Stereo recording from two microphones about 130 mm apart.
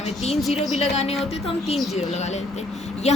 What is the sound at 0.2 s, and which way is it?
Speech, 55° left (ahead or behind).